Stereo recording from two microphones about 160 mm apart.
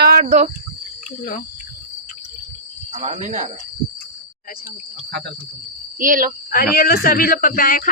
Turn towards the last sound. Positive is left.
turn(degrees=60)  # may be behind; listen again after turning